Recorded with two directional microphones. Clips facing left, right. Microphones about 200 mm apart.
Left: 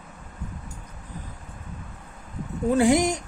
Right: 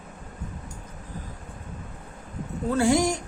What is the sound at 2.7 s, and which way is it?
Male singing, 20° left (ahead or behind).